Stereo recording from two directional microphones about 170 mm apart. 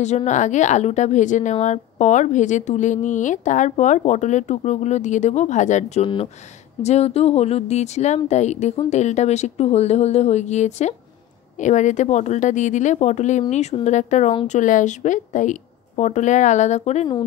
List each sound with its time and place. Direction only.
0.0 s a woman's voice: 40° left (ahead or behind)